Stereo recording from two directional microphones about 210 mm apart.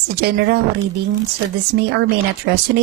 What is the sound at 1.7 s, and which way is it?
Speech, 50° right (ahead or behind).